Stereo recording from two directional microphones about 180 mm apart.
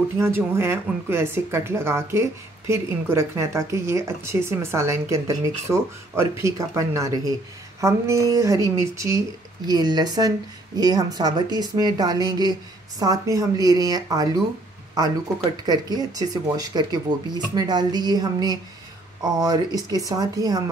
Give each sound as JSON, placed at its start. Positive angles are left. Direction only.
{"t": 0.2, "sound": "a woman's voice", "side_deg": -15}
{"t": 15.6, "sound": "a woman's voice", "side_deg": -20}